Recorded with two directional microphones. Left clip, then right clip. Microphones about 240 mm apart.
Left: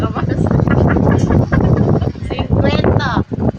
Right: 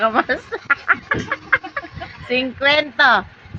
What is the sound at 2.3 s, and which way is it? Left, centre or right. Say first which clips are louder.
Speech: right 3 dB; centre.